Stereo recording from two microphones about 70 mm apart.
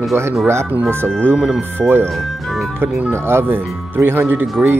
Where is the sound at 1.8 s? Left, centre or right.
Right.